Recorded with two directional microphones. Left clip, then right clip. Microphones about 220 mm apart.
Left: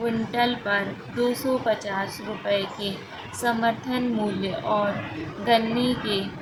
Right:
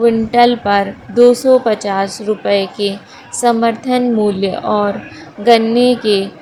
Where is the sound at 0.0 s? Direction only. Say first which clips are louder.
Right 14 dB; 40° right (ahead or behind).